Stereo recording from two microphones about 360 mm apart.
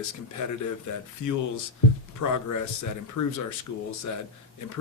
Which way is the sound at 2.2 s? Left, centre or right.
Left.